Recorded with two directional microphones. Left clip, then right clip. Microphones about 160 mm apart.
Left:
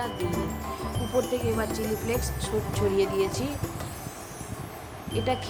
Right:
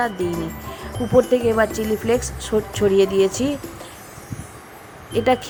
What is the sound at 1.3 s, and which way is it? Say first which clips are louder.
Speech: right 11 dB; 45° right (ahead or behind).